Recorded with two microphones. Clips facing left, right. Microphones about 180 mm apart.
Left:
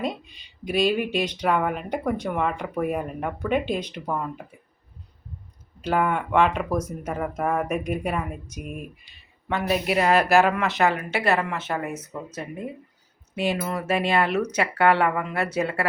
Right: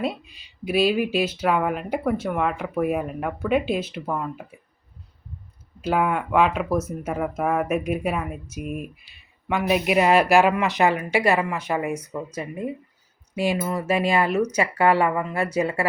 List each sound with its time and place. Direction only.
0.0 s speech: 5° right (ahead or behind)
5.8 s speech: 5° right (ahead or behind)
13.3 s speech: 10° right (ahead or behind)